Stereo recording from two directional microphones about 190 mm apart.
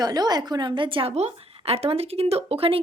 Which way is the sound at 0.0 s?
20° right (ahead or behind).